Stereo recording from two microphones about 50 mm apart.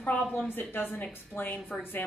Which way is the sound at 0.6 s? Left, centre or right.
Left.